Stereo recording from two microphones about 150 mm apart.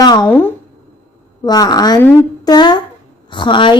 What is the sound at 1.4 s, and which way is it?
A woman's voice, 25° left (ahead or behind).